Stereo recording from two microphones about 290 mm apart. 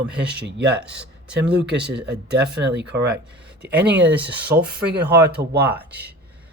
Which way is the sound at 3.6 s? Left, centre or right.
Centre.